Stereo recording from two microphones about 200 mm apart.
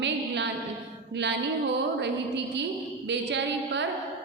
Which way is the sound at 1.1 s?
60° right (ahead or behind).